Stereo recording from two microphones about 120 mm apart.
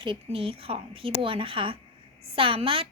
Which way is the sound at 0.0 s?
45° right (ahead or behind).